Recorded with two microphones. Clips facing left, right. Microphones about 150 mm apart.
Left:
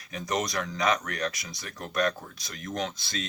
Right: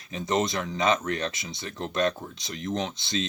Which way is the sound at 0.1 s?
25° right (ahead or behind).